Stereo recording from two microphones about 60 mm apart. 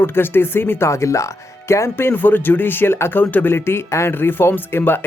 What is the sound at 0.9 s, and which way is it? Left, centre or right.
Speech, left.